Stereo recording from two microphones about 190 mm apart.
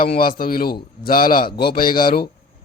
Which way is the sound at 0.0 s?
50° left (ahead or behind).